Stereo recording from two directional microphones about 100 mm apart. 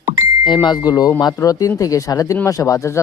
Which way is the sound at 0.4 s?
50° left (ahead or behind).